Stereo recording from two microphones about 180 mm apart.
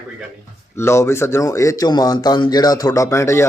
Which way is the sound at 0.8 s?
15° left (ahead or behind).